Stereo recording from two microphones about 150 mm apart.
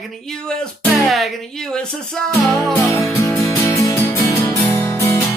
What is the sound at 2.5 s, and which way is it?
Music, 20° left (ahead or behind).